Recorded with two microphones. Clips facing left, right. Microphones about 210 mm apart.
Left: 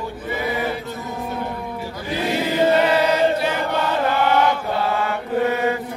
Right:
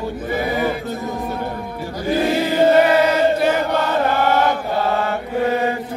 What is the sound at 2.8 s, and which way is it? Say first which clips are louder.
Choir: right 2 dB; 50° right (ahead or behind).